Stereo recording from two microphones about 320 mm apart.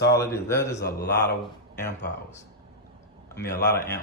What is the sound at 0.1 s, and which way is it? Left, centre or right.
Speech, centre.